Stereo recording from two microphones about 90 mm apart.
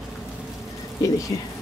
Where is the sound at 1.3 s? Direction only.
55° left (ahead or behind).